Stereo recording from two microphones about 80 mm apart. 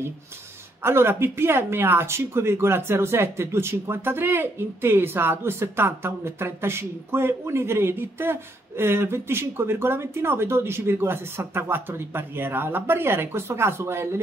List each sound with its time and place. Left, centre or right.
0.8 s speech: right